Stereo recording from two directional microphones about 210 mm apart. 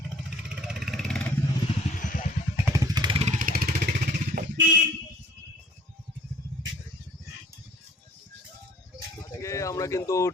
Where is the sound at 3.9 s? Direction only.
50° right (ahead or behind).